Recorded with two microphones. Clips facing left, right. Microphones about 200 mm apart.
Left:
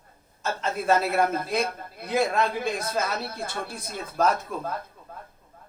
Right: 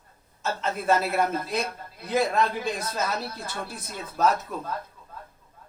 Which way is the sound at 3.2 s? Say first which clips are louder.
Left 2 dB; 55° left (ahead or behind).